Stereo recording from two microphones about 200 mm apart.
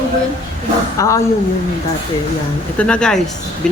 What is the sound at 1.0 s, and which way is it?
Speech, 15° left (ahead or behind).